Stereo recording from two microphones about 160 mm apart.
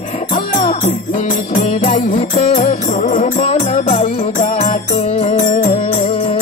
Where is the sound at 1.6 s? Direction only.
55° left (ahead or behind).